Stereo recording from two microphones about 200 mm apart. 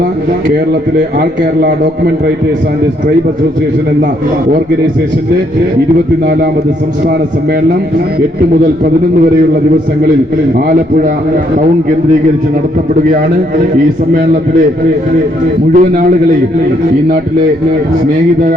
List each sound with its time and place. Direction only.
10.7 s a man's voice: 45° right (ahead or behind)
15.7 s a man's voice: 40° right (ahead or behind)